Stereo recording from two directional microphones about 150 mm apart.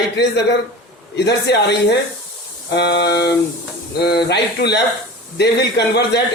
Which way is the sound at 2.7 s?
90° left.